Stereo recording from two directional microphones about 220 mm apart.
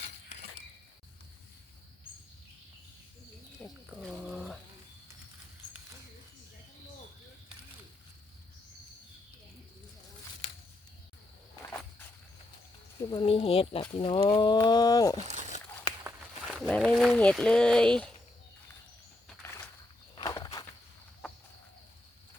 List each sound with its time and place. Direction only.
3.8 s bird: 5° right (ahead or behind)
10.4 s a sound: 55° left (ahead or behind)
13.1 s speech: 25° left (ahead or behind)
15.3 s crumpling: 30° right (ahead or behind)
16.5 s speech: centre (ahead or behind)
20.1 s walk: 15° left (ahead or behind)